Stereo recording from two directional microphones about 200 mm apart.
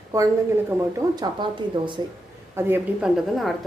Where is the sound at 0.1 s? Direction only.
15° right (ahead or behind).